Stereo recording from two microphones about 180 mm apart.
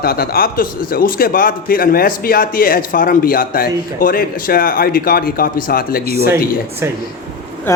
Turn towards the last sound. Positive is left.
turn(degrees=55)  # may be behind; listen again after turning